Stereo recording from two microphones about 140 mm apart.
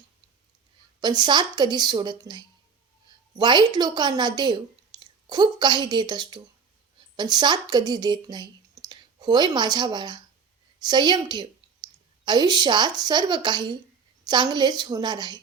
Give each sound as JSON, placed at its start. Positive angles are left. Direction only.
{"t": 0.9, "sound": "speech", "side_deg": -30}
{"t": 4.9, "sound": "a sound", "side_deg": -30}
{"t": 5.3, "sound": "speech", "side_deg": -30}